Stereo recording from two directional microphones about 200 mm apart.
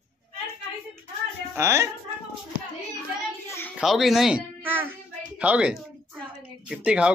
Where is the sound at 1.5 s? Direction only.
15° right (ahead or behind).